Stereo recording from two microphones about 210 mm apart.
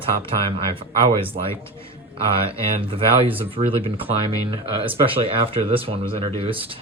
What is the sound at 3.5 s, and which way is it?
Speech, 25° right (ahead or behind).